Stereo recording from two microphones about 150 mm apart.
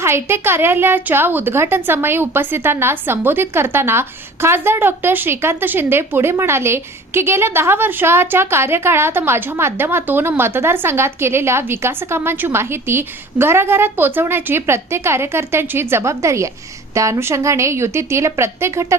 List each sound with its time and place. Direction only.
0.0 s a woman's voice: 15° right (ahead or behind)